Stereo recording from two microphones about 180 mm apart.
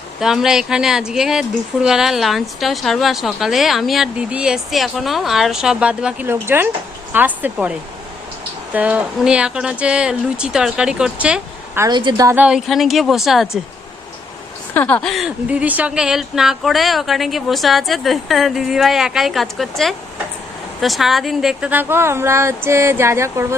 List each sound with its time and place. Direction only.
0.2 s speech: centre (ahead or behind)
11.9 s speech: 25° right (ahead or behind); by 13.6 s centre (ahead or behind)
14.7 s speech: 10° left (ahead or behind); by 23.6 s 15° right (ahead or behind)